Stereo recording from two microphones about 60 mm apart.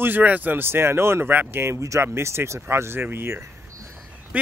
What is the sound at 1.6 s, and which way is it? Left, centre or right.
Speech, right.